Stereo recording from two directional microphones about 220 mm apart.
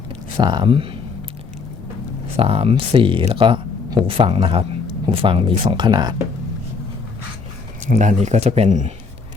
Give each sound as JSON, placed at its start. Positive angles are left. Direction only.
{"t": 0.3, "sound": "speech", "side_deg": -20}
{"t": 2.3, "sound": "speech", "side_deg": -25}
{"t": 7.9, "sound": "speech", "side_deg": -35}